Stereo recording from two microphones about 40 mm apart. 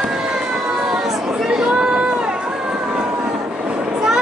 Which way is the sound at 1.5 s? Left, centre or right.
Centre.